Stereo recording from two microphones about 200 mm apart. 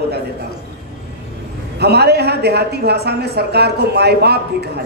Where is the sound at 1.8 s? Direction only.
55° right (ahead or behind).